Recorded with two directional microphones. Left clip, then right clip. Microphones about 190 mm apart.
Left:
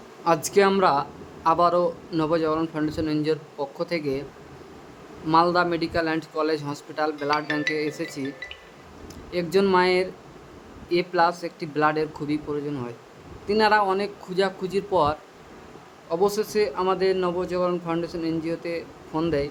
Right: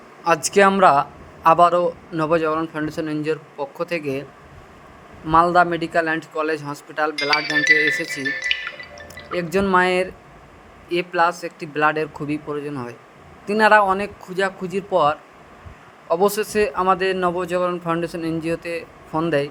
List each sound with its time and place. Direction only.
0.3 s a man's voice: 20° right (ahead or behind)
5.3 s speech: 15° right (ahead or behind)
8.5 s music: 50° right (ahead or behind)
9.3 s speech: 15° right (ahead or behind)
16.0 s a man's voice: 20° right (ahead or behind)